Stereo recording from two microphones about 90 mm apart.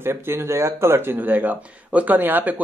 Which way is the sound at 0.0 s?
25° right (ahead or behind).